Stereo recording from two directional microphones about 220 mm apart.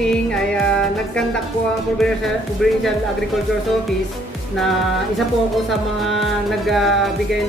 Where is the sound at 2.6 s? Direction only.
Centre (ahead or behind).